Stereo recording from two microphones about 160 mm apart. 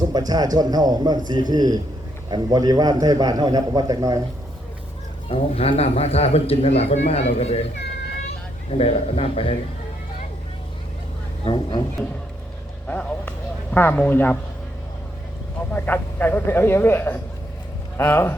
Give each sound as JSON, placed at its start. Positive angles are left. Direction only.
{"t": 0.1, "sound": "a man's voice", "side_deg": -25}
{"t": 5.3, "sound": "a man's voice", "side_deg": 40}
{"t": 8.8, "sound": "a man's voice", "side_deg": 40}
{"t": 11.4, "sound": "speech", "side_deg": 25}
{"t": 12.9, "sound": "a man's voice", "side_deg": 10}
{"t": 15.7, "sound": "speech", "side_deg": 10}